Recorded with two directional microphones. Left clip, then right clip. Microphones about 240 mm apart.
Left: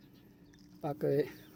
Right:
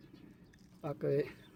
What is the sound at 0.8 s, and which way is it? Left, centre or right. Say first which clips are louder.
Speech: left 2 dB; centre.